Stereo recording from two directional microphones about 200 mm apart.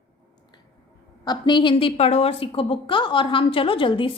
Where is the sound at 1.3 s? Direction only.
25° left (ahead or behind).